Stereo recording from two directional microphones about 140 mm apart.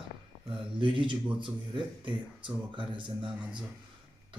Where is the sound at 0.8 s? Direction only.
35° right (ahead or behind).